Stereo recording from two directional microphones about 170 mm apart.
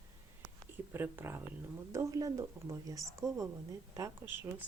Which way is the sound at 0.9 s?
10° right (ahead or behind).